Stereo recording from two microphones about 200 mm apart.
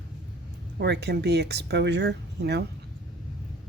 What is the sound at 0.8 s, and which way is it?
Speech, 55° right (ahead or behind).